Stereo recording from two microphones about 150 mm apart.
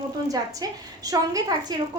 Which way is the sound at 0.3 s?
25° right (ahead or behind).